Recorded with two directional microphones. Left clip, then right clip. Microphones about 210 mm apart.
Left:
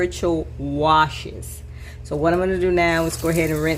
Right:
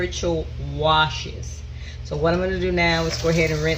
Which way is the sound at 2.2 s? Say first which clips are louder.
Left 2 dB; 50° left (ahead or behind).